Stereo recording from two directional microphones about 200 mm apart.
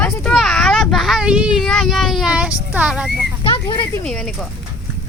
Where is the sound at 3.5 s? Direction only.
25° left (ahead or behind).